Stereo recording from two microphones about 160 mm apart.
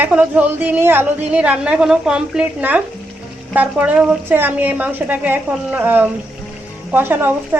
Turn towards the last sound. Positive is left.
turn(degrees=-15)  # may be behind; listen again after turning